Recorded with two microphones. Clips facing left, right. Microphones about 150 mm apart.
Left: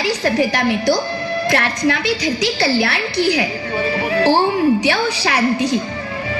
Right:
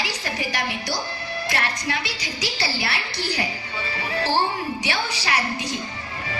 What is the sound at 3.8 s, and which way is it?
Music, 55° left (ahead or behind).